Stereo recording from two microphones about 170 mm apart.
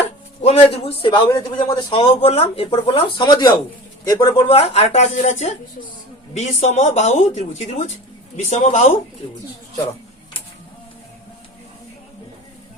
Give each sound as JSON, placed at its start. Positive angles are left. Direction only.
{"t": 0.4, "sound": "speech", "side_deg": 35}
{"t": 4.4, "sound": "speech", "side_deg": 35}